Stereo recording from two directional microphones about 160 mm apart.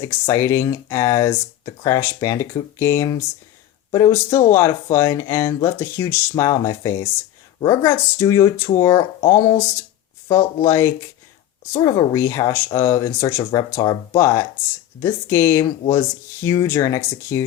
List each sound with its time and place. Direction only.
0.0 s speech: 15° left (ahead or behind)